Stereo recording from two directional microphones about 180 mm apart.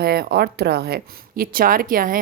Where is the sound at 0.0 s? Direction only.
60° right (ahead or behind).